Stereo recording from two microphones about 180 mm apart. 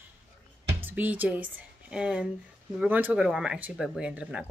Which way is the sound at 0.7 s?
10° right (ahead or behind).